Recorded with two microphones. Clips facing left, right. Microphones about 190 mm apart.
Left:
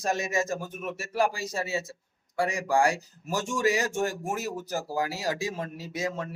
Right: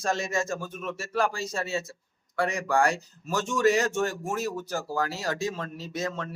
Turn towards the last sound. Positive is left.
turn(degrees=15)  # may be behind; listen again after turning